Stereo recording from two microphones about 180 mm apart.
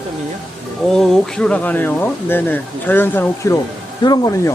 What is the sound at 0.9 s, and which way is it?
Speech, 5° left (ahead or behind).